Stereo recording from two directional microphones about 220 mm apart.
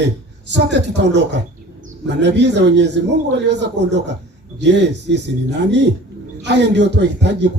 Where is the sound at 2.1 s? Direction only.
50° right (ahead or behind).